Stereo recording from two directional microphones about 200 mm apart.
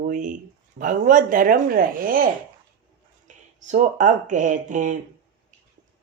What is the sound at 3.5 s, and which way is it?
Speech, 40° right (ahead or behind).